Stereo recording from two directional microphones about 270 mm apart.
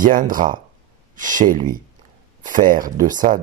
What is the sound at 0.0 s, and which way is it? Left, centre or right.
Speech, right.